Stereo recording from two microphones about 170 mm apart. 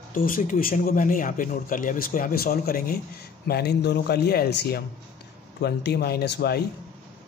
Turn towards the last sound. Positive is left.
turn(degrees=70)  # may be behind; listen again after turning